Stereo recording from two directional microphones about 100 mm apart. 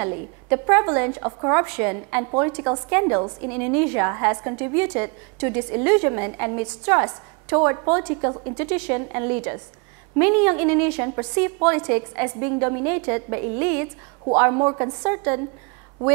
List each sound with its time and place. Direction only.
0.0 s a woman's voice: 20° right (ahead or behind)